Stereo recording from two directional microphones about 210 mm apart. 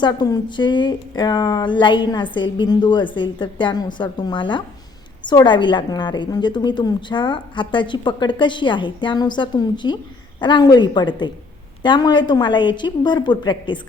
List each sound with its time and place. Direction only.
0.0 s a woman's voice: 20° left (ahead or behind)